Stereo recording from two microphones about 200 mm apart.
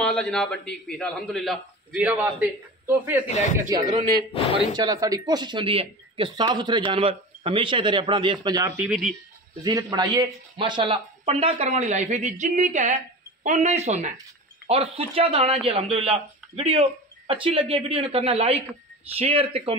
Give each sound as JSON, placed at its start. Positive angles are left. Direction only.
{"t": 0.0, "sound": "a man's voice", "side_deg": 5}
{"t": 3.3, "sound": "speech", "side_deg": 35}
{"t": 4.7, "sound": "speech", "side_deg": -20}